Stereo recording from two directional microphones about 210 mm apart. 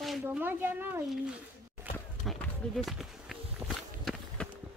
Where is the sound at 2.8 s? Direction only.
Centre (ahead or behind).